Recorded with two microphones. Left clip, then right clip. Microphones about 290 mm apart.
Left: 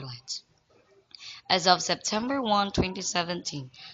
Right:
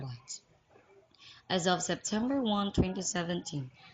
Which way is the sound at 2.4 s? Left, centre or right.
Left.